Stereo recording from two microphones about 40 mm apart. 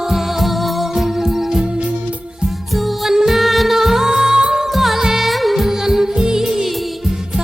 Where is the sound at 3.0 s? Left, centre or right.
Centre.